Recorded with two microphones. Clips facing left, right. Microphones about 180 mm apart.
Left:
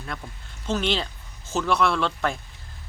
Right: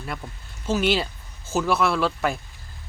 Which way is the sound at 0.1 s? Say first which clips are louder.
Right 2 dB; 5° right (ahead or behind).